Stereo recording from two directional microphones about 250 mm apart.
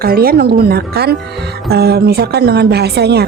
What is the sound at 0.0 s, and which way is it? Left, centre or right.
A woman's voice, right.